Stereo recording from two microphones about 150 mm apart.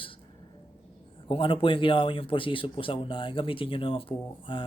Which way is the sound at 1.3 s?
35° left (ahead or behind).